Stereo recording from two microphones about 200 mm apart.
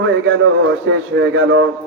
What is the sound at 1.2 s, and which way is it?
Speech, 75° right (ahead or behind).